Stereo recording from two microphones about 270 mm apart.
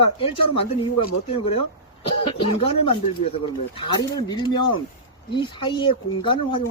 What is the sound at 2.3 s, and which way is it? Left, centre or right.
Speech, centre.